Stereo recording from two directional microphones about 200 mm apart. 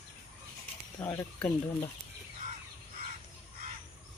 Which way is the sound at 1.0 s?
10° left (ahead or behind).